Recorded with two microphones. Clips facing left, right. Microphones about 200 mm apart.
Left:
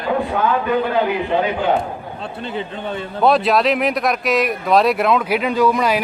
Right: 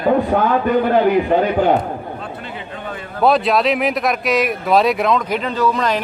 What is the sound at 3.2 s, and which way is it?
Speech, centre (ahead or behind).